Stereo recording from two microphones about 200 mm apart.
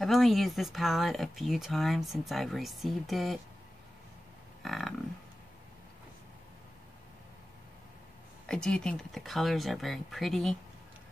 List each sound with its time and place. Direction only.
0.0 s speech: centre (ahead or behind)
4.6 s speech: centre (ahead or behind)
8.5 s speech: 5° left (ahead or behind)